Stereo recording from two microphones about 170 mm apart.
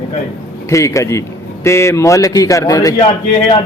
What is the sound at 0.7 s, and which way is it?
A man's voice, 20° left (ahead or behind).